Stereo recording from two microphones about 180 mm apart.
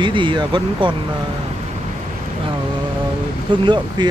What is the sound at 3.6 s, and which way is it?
Speech, 25° right (ahead or behind).